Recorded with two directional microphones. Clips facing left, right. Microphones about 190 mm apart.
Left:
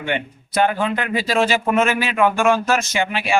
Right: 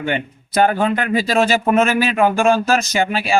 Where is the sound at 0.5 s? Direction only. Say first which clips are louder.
Right 3 dB; 45° right (ahead or behind).